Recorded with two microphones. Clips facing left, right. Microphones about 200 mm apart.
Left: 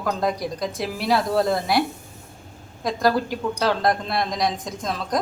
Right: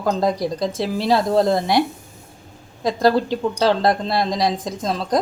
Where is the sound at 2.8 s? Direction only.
25° right (ahead or behind).